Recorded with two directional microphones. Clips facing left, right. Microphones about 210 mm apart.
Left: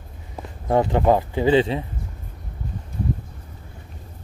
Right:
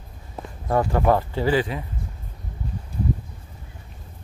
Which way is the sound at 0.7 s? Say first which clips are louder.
Left 2 dB; 20° left (ahead or behind).